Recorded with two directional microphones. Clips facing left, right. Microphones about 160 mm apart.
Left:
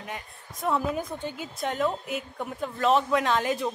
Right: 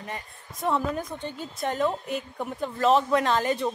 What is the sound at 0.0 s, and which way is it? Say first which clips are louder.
A woman's voice: right 1 dB; centre (ahead or behind).